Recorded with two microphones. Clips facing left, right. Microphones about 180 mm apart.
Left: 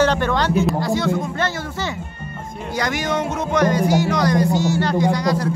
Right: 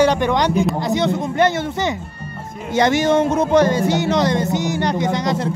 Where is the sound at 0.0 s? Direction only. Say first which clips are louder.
Right 2 dB; 15° right (ahead or behind).